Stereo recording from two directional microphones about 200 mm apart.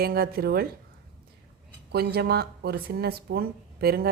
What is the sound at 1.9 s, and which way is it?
Speech, 50° right (ahead or behind).